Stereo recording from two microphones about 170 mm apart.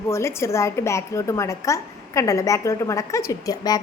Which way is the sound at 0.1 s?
15° left (ahead or behind).